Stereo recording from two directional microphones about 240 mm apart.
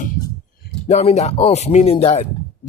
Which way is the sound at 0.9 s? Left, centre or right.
Left.